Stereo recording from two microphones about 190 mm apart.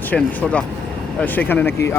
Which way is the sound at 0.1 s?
10° left (ahead or behind).